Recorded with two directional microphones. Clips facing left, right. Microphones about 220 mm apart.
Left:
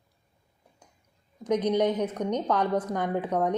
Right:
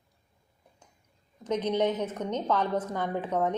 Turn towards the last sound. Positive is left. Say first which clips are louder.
# left 2 dB
turn(degrees=15)  # may be behind; listen again after turning